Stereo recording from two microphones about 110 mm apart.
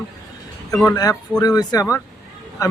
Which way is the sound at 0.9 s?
35° left (ahead or behind).